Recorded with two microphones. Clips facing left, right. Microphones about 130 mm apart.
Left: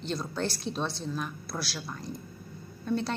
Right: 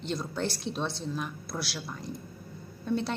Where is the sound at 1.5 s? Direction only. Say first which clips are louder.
Even; 10° left (ahead or behind).